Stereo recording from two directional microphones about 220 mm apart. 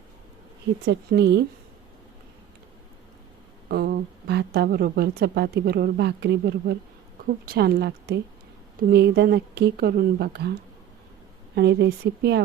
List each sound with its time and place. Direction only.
0.9 s speech: 50° right (ahead or behind)
3.7 s a woman's voice: 45° right (ahead or behind)
11.5 s speech: 50° right (ahead or behind)